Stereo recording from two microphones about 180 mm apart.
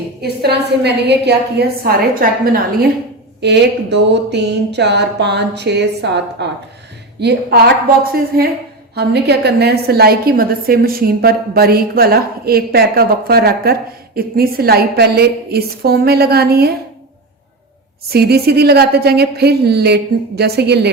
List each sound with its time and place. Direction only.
0.2 s a woman's voice: 65° right (ahead or behind)
3.4 s a woman's voice: 70° right (ahead or behind)
18.1 s a woman's voice: 60° right (ahead or behind)